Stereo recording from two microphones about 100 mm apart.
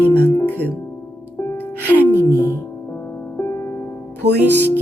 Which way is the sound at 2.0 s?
25° right (ahead or behind).